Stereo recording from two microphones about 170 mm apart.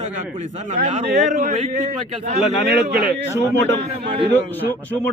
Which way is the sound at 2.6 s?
65° right (ahead or behind).